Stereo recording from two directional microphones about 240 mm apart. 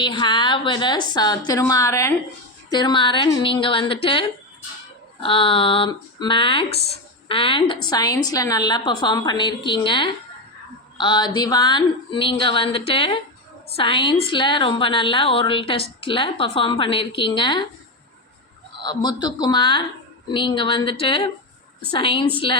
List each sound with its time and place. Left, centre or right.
0.0 s a woman's voice: centre
10.9 s a sound: centre
11.3 s a woman's voice: centre
18.8 s a woman's voice: centre